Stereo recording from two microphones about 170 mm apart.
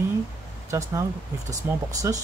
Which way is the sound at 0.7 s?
20° right (ahead or behind).